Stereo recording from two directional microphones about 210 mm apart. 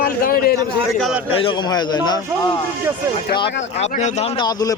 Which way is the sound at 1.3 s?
20° left (ahead or behind).